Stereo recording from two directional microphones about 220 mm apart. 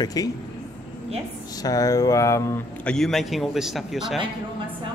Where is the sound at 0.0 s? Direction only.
15° left (ahead or behind).